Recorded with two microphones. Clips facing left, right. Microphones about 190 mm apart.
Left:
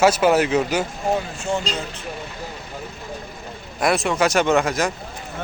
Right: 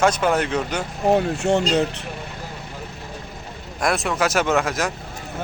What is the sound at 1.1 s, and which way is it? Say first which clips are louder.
Speech: right 6 dB; 65° right (ahead or behind).